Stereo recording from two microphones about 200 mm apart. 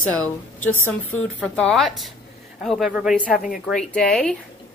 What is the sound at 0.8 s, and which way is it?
Speech, 90° left.